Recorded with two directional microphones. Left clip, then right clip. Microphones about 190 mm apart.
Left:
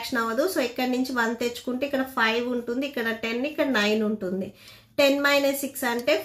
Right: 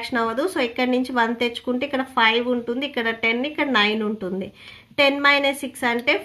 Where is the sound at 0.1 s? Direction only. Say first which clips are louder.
Right 2 dB; 40° right (ahead or behind).